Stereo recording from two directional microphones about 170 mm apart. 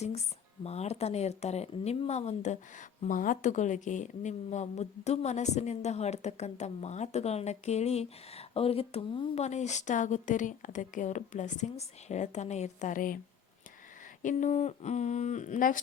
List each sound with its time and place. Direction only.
0.6 s speech: 40° left (ahead or behind)
14.2 s speech: 45° left (ahead or behind)